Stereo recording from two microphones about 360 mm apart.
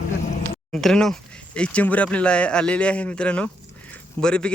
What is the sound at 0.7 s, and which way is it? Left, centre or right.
A man's voice, centre.